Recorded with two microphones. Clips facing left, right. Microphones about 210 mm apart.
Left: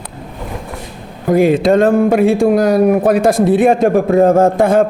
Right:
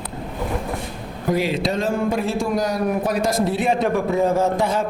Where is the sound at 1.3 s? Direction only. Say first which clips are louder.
Left 11 dB; 50° left (ahead or behind).